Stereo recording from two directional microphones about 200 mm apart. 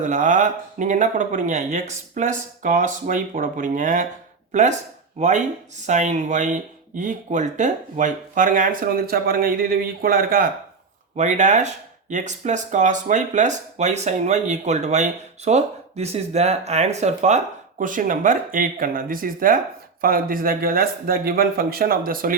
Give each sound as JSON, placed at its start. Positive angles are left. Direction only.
{"t": 0.0, "sound": "speech", "side_deg": -40}
{"t": 5.8, "sound": "speech", "side_deg": -35}
{"t": 11.2, "sound": "speech", "side_deg": -35}